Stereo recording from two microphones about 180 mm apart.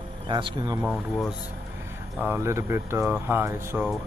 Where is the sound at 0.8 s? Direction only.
5° right (ahead or behind).